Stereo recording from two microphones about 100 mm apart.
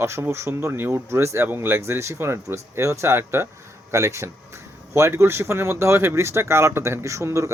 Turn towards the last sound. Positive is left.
turn(degrees=-30)  # may be behind; listen again after turning